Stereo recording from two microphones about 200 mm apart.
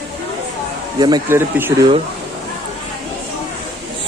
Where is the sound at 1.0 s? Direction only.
15° right (ahead or behind).